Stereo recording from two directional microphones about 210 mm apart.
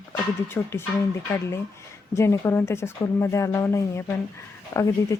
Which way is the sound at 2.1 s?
15° left (ahead or behind).